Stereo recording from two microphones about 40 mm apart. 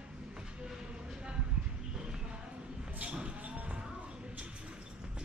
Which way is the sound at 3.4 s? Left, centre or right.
Right.